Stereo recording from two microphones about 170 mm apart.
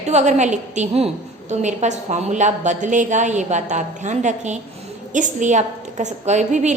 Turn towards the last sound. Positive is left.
turn(degrees=-45)  # may be behind; listen again after turning